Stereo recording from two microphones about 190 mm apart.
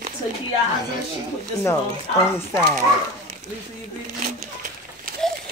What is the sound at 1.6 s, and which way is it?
Speech, 15° left (ahead or behind).